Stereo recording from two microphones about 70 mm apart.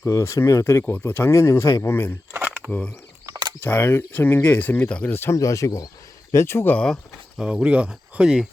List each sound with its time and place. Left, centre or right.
0.0 s speech: left
2.6 s speech: right
3.7 s speech: left
5.1 s speech: left
5.4 s speech: left
6.3 s speech: left
6.7 s speech: centre
7.3 s speech: centre